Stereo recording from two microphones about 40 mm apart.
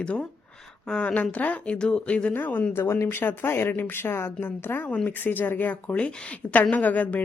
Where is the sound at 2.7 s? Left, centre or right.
Left.